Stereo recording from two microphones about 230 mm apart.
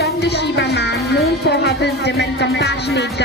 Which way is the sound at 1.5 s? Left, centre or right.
Left.